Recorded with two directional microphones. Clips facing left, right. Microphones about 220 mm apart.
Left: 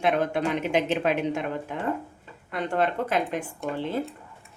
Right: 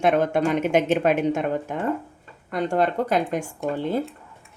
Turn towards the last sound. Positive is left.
turn(degrees=-45)  # may be behind; listen again after turning